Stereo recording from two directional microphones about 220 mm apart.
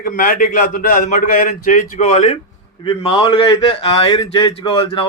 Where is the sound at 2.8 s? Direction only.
20° left (ahead or behind).